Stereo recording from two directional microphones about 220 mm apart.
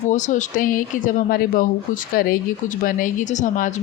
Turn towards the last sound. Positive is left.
turn(degrees=35)  # may be behind; listen again after turning